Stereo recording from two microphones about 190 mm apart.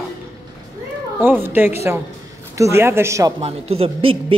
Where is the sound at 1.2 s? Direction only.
10° right (ahead or behind).